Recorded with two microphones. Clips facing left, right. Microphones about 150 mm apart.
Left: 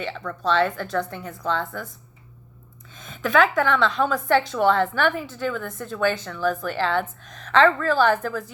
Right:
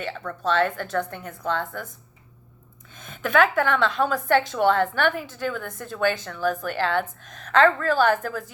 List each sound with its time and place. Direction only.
0.4 s a woman's voice: 50° right (ahead or behind)
2.9 s a woman's voice: 55° right (ahead or behind)